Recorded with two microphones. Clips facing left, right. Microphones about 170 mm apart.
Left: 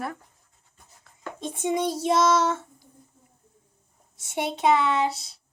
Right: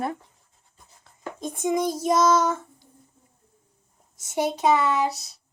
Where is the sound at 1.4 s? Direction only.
30° left (ahead or behind).